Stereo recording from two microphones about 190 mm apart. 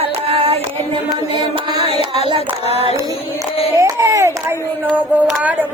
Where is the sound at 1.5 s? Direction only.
25° right (ahead or behind).